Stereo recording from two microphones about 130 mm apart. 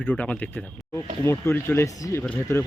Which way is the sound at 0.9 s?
20° left (ahead or behind).